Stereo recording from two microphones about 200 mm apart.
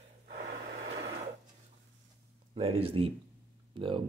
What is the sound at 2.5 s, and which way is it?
Speech, 30° right (ahead or behind).